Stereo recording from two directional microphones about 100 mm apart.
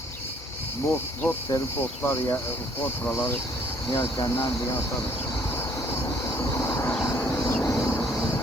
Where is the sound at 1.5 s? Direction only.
30° left (ahead or behind).